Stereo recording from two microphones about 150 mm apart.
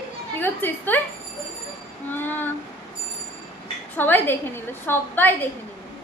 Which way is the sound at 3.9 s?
15° left (ahead or behind).